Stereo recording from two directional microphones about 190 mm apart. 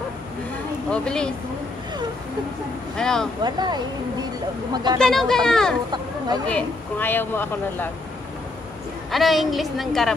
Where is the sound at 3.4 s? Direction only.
20° right (ahead or behind).